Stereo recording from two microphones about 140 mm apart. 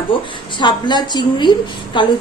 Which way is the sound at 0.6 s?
30° left (ahead or behind).